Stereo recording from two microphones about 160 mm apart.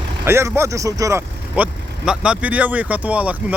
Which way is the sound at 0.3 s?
15° right (ahead or behind).